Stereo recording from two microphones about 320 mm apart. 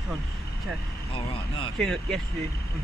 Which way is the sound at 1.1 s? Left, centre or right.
Centre.